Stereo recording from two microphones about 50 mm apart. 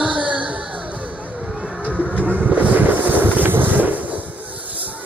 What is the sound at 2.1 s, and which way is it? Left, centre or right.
Vehicle, right.